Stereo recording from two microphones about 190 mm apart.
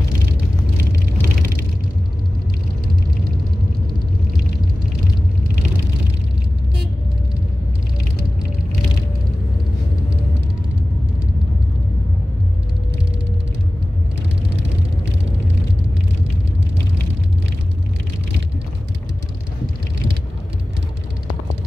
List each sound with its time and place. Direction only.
1.2 s vehicle: 50° right (ahead or behind)